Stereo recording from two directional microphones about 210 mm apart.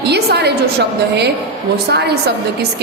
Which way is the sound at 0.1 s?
50° right (ahead or behind).